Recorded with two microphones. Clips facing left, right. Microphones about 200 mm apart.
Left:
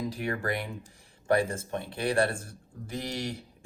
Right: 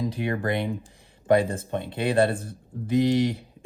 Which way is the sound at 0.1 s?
20° right (ahead or behind).